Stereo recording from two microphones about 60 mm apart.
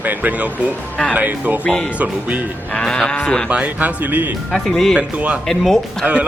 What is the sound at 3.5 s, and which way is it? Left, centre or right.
Speech, right.